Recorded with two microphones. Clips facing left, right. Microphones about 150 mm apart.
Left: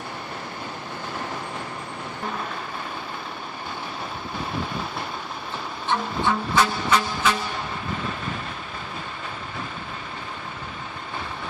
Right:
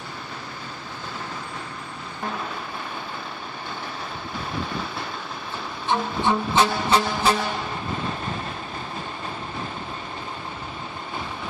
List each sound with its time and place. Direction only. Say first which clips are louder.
5.9 s vehicle: right 2 dB; 20° right (ahead or behind)